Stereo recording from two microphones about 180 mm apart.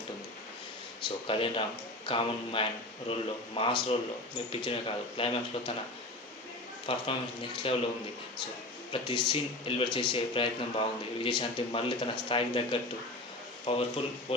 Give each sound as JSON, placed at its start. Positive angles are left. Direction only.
{"t": 1.0, "sound": "speech", "side_deg": 30}
{"t": 6.8, "sound": "speech", "side_deg": 30}
{"t": 8.9, "sound": "speech", "side_deg": 25}